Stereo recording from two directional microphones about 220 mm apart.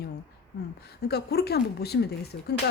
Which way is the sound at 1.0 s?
45° left (ahead or behind).